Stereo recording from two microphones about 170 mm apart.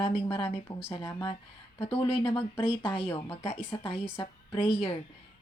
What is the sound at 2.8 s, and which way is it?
A woman's voice, 30° left (ahead or behind).